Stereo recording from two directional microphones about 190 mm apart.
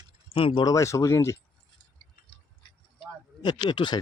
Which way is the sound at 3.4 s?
25° left (ahead or behind).